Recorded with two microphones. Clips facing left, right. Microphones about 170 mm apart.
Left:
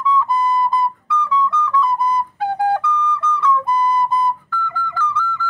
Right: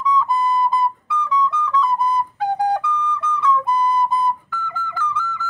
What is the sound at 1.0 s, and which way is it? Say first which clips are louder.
Music: left 1 dB; 15° right (ahead or behind).